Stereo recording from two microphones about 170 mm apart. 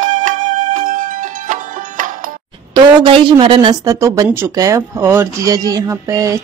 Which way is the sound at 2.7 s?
30° right (ahead or behind).